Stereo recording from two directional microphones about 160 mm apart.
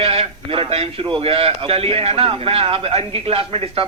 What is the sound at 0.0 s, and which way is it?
A man's voice, 35° right (ahead or behind).